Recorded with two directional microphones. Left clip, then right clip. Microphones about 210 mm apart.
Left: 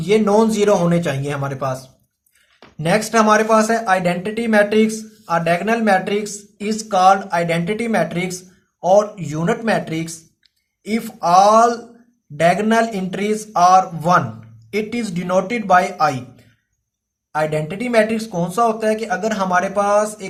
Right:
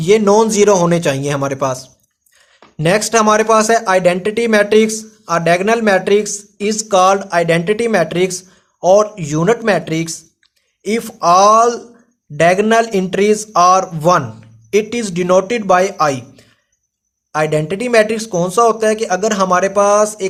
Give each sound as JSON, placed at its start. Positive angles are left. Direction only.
{"t": 0.0, "sound": "speech", "side_deg": -45}
{"t": 17.3, "sound": "speech", "side_deg": -45}